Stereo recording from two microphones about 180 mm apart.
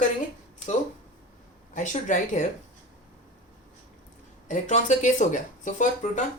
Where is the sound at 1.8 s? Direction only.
45° left (ahead or behind).